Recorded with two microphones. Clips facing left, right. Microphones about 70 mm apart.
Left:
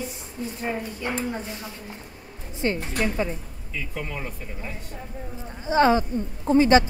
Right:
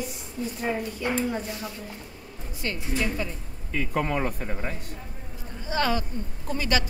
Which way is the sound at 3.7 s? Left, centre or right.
Right.